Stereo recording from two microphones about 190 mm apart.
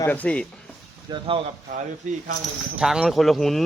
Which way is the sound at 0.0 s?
10° left (ahead or behind).